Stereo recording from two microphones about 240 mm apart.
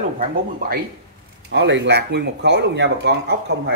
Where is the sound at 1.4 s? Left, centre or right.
Right.